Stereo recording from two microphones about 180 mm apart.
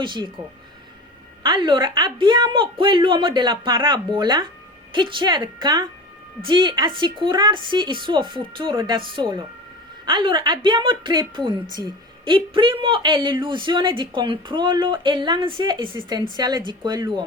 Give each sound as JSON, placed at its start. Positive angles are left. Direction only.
{"t": 0.0, "sound": "speech", "side_deg": -25}
{"t": 1.5, "sound": "speech", "side_deg": -25}